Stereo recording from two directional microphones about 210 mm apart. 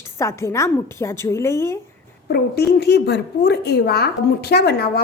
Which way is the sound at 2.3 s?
50° left (ahead or behind).